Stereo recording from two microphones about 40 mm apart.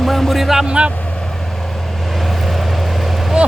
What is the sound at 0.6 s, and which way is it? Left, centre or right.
Speech, right.